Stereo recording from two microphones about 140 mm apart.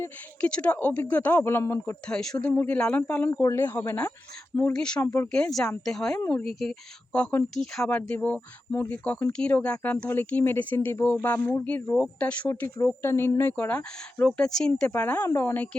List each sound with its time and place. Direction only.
0.0 s speech: 10° left (ahead or behind)
2.0 s speech: 5° left (ahead or behind)
5.0 s speech: 20° left (ahead or behind)
5.3 s speech: 5° left (ahead or behind)